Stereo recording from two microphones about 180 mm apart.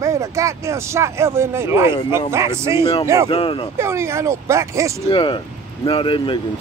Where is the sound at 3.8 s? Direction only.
15° right (ahead or behind).